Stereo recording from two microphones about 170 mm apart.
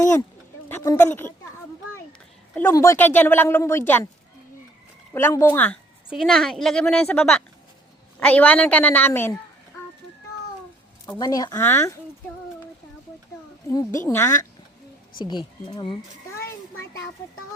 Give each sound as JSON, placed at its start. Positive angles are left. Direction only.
{"t": 0.7, "sound": "speech", "side_deg": 15}
{"t": 2.6, "sound": "a woman's voice", "side_deg": 15}
{"t": 5.1, "sound": "a woman's voice", "side_deg": 15}
{"t": 6.1, "sound": "a woman's voice", "side_deg": 0}
{"t": 11.2, "sound": "speech", "side_deg": 20}
{"t": 13.7, "sound": "a woman's voice", "side_deg": 15}
{"t": 15.2, "sound": "speech", "side_deg": 25}